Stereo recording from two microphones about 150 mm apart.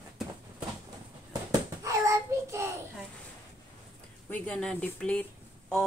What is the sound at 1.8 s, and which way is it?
Child singing, 20° right (ahead or behind).